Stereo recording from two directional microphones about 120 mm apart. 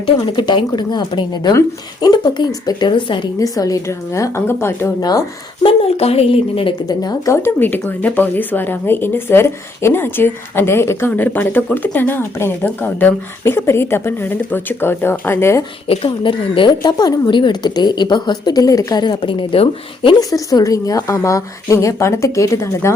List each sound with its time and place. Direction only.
0.0 s a woman's voice: 40° left (ahead or behind)
3.3 s a woman's voice: 30° left (ahead or behind)
5.6 s speech: 60° left (ahead or behind)
6.8 s a woman's voice: 35° left (ahead or behind)
7.3 s speech: 20° left (ahead or behind)
15.9 s a woman's voice: 50° left (ahead or behind)
20.1 s a woman's voice: 30° left (ahead or behind)